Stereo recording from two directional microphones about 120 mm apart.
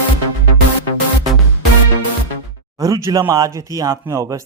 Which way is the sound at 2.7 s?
30° right (ahead or behind).